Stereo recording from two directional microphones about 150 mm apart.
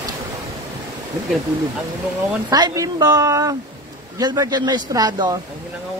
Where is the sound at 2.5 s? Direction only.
25° right (ahead or behind).